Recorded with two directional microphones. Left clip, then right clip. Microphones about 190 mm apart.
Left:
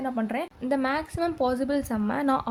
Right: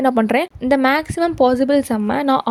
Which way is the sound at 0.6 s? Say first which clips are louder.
Right 9 dB; 35° right (ahead or behind).